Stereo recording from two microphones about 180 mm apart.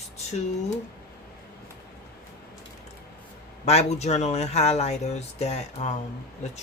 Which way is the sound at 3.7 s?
35° left (ahead or behind).